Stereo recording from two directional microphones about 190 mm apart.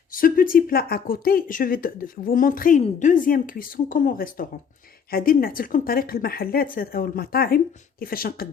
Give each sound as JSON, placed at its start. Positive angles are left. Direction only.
{"t": 0.1, "sound": "speech", "side_deg": 50}